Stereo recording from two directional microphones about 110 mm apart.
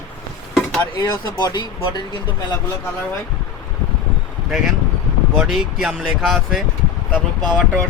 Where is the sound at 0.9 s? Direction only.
40° left (ahead or behind).